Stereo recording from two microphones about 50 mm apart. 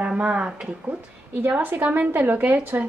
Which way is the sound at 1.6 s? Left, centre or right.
Right.